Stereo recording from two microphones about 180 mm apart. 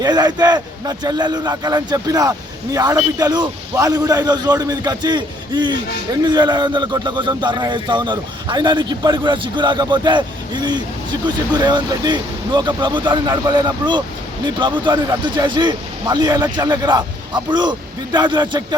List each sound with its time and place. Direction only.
0.0 s a man's voice: 20° right (ahead or behind)